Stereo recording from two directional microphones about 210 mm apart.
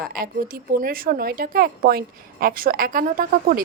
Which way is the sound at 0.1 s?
45° right (ahead or behind).